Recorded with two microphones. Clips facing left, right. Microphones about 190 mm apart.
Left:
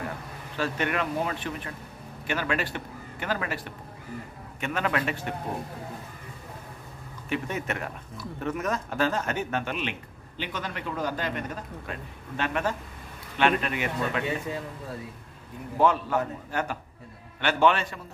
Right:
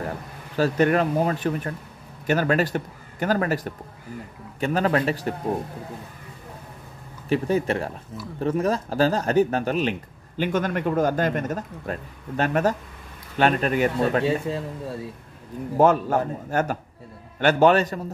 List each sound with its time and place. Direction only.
0.6 s a man's voice: 40° right (ahead or behind)
7.2 s a man's voice: 35° right (ahead or behind)
15.8 s a man's voice: 45° right (ahead or behind)